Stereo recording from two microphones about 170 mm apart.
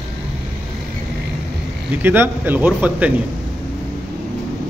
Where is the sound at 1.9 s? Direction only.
10° right (ahead or behind).